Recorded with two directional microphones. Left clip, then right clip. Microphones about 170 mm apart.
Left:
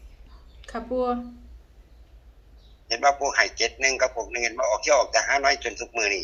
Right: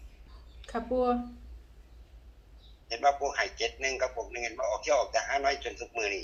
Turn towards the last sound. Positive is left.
turn(degrees=65)  # may be behind; listen again after turning